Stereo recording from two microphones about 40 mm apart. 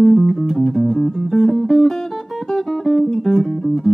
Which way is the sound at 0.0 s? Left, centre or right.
Centre.